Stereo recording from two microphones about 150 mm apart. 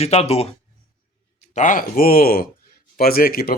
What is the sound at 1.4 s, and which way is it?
Speech, 55° left (ahead or behind).